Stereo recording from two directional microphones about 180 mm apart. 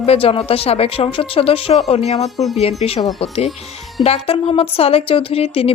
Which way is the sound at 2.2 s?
Centre (ahead or behind).